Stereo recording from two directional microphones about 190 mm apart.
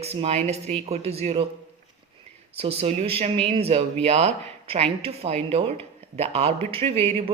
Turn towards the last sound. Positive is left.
turn(degrees=-30)  # may be behind; listen again after turning